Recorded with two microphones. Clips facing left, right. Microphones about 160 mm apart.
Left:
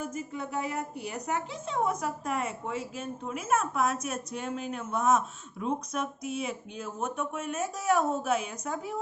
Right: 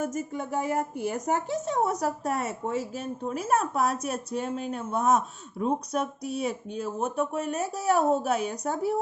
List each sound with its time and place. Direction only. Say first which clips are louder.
0.0 s speech: right 5 dB; 45° right (ahead or behind)